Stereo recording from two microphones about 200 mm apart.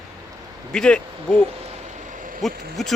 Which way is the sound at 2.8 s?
Centre (ahead or behind).